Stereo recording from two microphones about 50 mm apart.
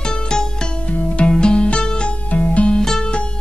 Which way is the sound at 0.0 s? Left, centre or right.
Centre.